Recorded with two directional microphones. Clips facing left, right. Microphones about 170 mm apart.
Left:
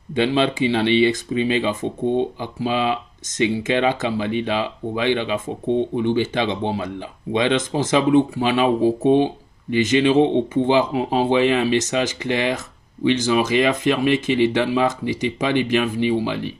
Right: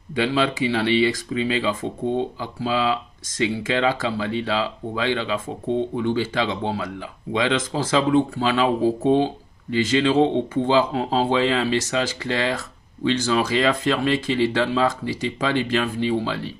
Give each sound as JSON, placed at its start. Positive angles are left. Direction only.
{"t": 0.1, "sound": "speech", "side_deg": 25}